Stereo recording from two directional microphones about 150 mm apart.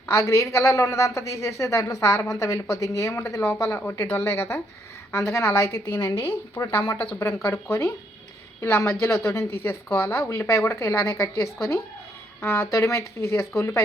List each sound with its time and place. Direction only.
0.1 s a woman's voice: 20° left (ahead or behind)